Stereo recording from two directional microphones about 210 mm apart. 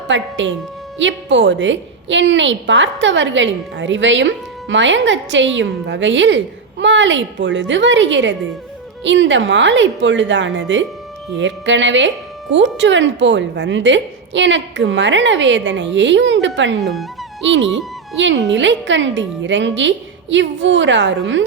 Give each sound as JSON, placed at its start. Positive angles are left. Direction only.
{"t": 0.1, "sound": "a woman's voice", "side_deg": -60}